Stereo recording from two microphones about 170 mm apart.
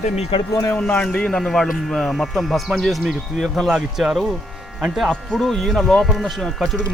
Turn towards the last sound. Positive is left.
turn(degrees=0)  # may be behind; listen again after turning